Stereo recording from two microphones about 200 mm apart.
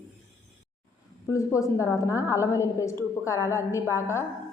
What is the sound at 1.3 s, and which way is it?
A woman's voice, 15° left (ahead or behind).